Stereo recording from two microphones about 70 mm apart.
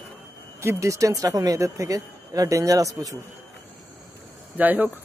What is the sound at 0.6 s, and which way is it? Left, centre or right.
Speech, right.